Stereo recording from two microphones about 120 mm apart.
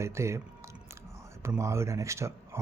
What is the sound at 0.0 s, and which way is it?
Speech, 25° right (ahead or behind).